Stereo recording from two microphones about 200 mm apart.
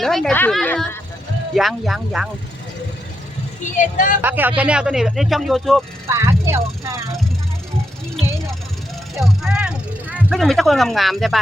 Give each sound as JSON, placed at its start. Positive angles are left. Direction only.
{"t": 0.0, "sound": "speech", "side_deg": 0}
{"t": 3.6, "sound": "speech", "side_deg": 40}
{"t": 4.2, "sound": "speech", "side_deg": -10}
{"t": 6.1, "sound": "speech", "side_deg": -15}
{"t": 9.1, "sound": "vehicle", "side_deg": 0}